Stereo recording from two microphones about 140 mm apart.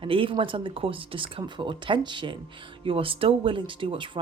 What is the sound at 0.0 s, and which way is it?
Speech, 40° right (ahead or behind).